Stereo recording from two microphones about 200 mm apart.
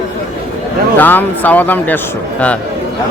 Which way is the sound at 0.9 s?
10° left (ahead or behind).